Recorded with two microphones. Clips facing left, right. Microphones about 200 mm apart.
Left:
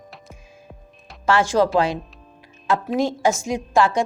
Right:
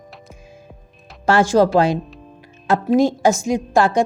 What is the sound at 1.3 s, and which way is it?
Speech, 40° right (ahead or behind).